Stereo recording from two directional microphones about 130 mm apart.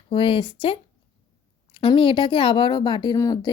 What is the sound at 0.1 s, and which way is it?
Speech, 40° left (ahead or behind).